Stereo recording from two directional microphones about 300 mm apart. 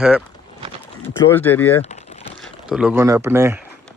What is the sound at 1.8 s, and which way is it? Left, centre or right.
Crumpling, left.